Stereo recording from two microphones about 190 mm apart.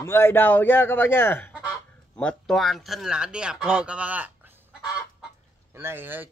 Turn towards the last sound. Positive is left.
turn(degrees=-10)  # may be behind; listen again after turning